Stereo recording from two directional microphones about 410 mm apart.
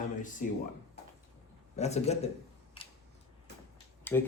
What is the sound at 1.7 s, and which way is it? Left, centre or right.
Speech, centre.